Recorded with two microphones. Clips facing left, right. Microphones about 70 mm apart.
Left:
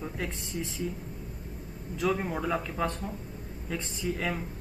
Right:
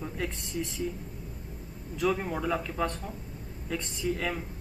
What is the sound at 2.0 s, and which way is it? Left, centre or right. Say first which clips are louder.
A man's voice: even; centre.